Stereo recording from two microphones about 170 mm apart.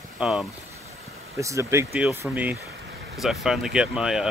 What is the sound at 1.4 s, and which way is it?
Speech, 20° right (ahead or behind).